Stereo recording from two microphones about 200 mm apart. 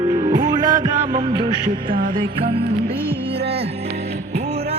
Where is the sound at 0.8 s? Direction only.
25° right (ahead or behind).